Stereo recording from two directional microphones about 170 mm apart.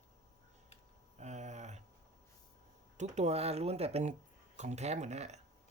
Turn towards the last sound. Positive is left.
turn(degrees=-40)  # may be behind; listen again after turning